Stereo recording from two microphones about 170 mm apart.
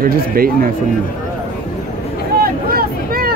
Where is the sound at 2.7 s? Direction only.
60° right (ahead or behind).